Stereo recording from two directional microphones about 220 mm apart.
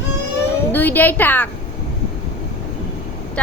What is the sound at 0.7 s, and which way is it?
Speech, 10° left (ahead or behind).